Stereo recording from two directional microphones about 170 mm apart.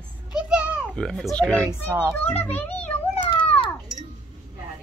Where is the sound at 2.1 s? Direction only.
10° left (ahead or behind).